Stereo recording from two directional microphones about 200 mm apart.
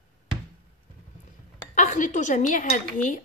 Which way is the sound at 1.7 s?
40° left (ahead or behind).